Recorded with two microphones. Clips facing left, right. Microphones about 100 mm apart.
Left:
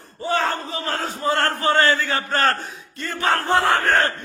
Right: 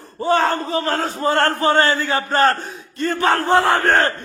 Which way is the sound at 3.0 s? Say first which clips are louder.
Right 4 dB; 40° right (ahead or behind).